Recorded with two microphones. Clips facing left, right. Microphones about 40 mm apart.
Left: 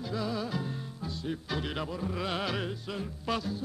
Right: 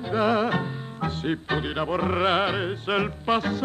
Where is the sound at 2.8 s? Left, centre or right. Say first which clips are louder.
Right 13 dB; right.